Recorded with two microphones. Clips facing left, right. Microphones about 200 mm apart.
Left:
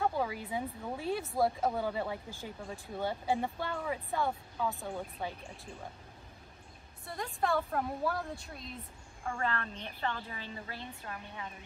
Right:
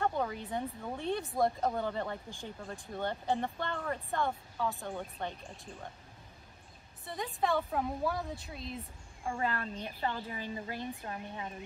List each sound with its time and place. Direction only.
0.0 s speech: 5° left (ahead or behind)
7.1 s a woman's voice: centre (ahead or behind)
9.2 s a woman's voice: 15° right (ahead or behind)